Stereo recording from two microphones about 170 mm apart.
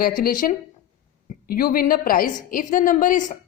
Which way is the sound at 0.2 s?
55° left (ahead or behind).